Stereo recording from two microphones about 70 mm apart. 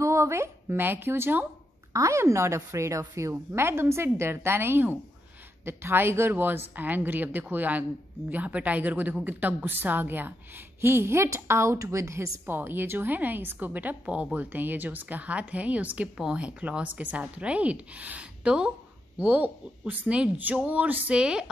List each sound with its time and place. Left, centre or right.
0.0 s a woman's voice: right
2.0 s a woman's voice: right
3.5 s a woman's voice: right
12.5 s a woman's voice: right; by 21.5 s centre